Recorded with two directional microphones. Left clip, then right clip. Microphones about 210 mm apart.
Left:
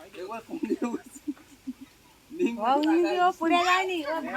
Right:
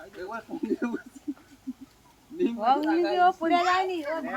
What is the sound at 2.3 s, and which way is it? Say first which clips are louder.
Speech: right 1 dB; 45° left (ahead or behind).